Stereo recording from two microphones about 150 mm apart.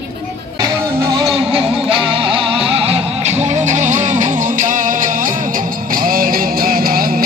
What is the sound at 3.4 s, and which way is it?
Music, 50° right (ahead or behind).